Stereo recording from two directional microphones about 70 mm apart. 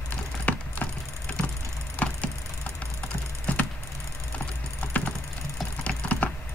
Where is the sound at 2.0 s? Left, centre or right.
Left.